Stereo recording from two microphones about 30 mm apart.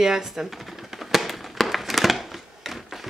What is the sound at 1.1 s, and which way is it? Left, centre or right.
Fireworks, centre.